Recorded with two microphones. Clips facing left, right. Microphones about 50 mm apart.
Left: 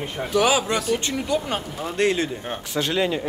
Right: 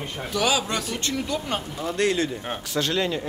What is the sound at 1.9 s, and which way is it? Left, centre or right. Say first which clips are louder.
Speech: left 2 dB; left.